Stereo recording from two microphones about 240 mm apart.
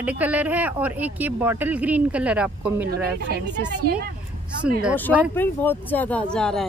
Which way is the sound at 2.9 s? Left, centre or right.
Right.